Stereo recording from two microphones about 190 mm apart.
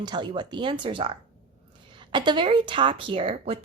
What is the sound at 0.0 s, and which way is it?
A woman's voice, 25° right (ahead or behind).